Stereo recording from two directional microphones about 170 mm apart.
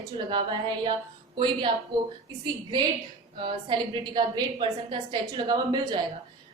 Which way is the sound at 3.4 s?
30° right (ahead or behind).